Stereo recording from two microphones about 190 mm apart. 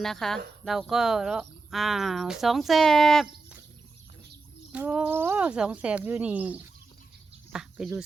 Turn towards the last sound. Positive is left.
turn(degrees=-5)  # may be behind; listen again after turning